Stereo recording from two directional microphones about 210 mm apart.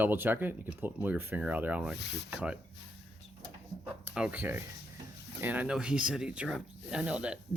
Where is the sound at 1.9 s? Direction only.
55° left (ahead or behind).